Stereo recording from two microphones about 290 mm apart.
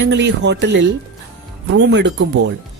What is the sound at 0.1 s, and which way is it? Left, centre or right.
Speech, right.